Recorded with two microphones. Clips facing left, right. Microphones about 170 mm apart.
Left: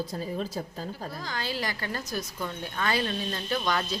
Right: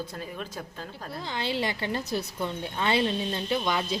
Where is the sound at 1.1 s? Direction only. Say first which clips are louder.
Right 6 dB; 25° right (ahead or behind).